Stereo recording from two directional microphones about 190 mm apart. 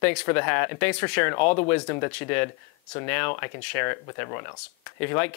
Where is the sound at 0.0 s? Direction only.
10° left (ahead or behind).